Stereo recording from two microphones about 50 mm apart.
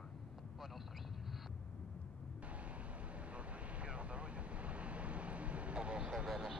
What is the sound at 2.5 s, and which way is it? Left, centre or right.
Vehicle, right.